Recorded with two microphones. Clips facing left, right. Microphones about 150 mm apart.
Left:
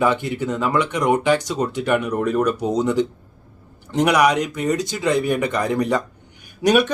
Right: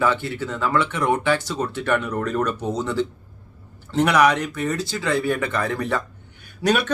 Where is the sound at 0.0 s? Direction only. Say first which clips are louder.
Left 3 dB; 15° left (ahead or behind).